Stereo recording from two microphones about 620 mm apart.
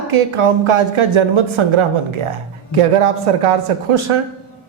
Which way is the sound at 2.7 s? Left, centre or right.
Right.